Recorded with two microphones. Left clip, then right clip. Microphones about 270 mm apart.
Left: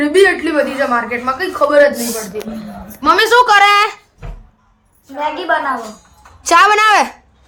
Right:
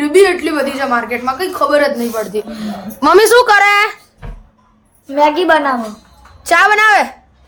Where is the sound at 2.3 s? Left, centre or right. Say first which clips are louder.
Right 5 dB; right.